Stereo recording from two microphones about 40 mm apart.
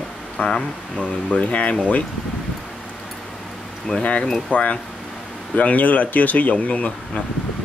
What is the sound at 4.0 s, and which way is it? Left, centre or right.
Speech, left.